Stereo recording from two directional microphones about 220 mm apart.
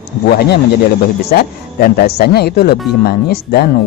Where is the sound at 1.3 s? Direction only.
45° left (ahead or behind).